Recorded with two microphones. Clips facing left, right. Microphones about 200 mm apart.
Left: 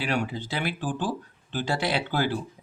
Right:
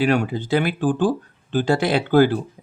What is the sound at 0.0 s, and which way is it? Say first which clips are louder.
Speech: right 9 dB; 50° right (ahead or behind).